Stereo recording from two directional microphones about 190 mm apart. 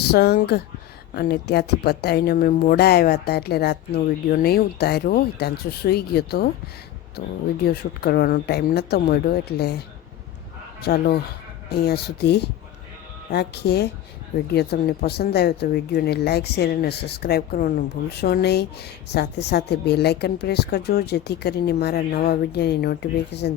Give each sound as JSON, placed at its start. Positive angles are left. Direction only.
{"t": 0.0, "sound": "a woman's voice", "side_deg": 55}
{"t": 7.6, "sound": "a woman's voice", "side_deg": 55}